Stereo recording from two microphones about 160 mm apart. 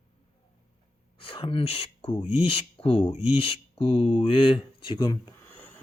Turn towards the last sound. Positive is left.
turn(degrees=25)  # may be behind; listen again after turning